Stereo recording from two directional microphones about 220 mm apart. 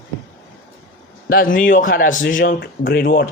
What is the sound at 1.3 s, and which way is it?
Speech, 40° left (ahead or behind).